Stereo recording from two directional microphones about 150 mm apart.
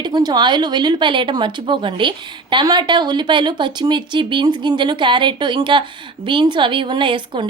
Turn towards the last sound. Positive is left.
turn(degrees=-35)  # may be behind; listen again after turning